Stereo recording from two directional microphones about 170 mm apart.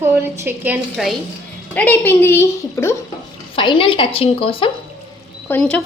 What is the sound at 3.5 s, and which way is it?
A woman's voice, 30° left (ahead or behind).